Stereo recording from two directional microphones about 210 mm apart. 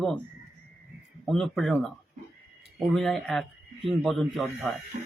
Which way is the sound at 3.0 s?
Centre (ahead or behind).